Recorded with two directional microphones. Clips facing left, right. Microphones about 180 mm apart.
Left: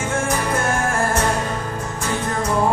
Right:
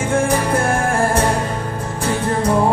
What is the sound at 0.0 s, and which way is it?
Music, 30° right (ahead or behind).